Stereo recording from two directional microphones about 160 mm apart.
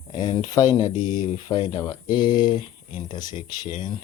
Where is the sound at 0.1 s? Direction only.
25° left (ahead or behind).